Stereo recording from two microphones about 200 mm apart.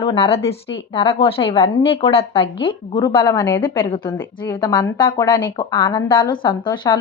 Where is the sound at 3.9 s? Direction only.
25° left (ahead or behind).